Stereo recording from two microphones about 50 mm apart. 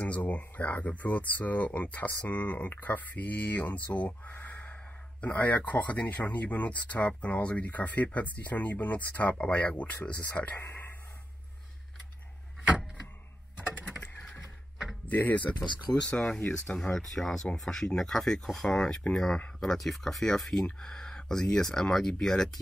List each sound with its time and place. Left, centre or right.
0.0 s speech: left
4.3 s a sound: left
5.2 s speech: left
10.6 s a sound: left
15.0 s speech: left
16.6 s speech: left
16.9 s speech: centre